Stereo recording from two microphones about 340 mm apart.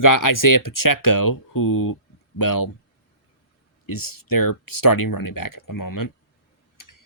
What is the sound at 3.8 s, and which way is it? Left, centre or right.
Speech, left.